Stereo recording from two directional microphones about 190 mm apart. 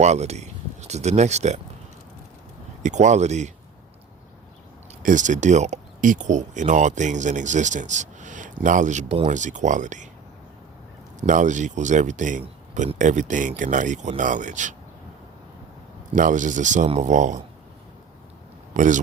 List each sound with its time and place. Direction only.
0.0 s speech: 35° right (ahead or behind)
2.8 s speech: 40° right (ahead or behind)
5.0 s speech: 40° right (ahead or behind)
11.2 s speech: 40° right (ahead or behind)
16.1 s speech: 40° right (ahead or behind)
18.7 s a man's voice: 40° right (ahead or behind)